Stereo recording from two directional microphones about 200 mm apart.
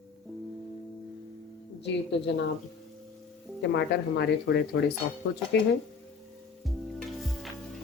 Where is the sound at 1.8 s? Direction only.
60° left (ahead or behind).